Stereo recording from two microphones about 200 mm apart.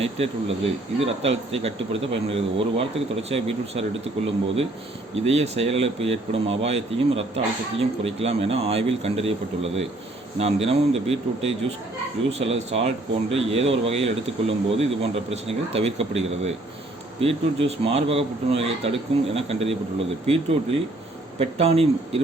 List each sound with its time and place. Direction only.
0.0 s speech: 30° right (ahead or behind)
5.2 s speech: 30° right (ahead or behind)